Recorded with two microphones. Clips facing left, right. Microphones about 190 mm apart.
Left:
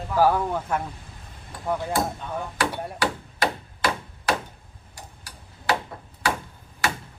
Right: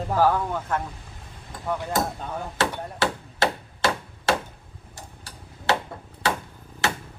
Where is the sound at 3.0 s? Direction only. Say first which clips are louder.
Right 2 dB; 25° right (ahead or behind).